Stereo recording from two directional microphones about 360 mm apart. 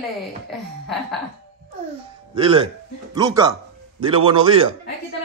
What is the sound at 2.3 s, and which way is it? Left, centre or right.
A man's voice, centre.